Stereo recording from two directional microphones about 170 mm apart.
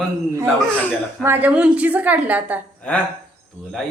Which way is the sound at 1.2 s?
10° right (ahead or behind).